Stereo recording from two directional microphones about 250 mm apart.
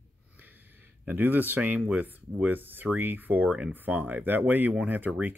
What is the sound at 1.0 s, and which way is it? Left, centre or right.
Speech, centre.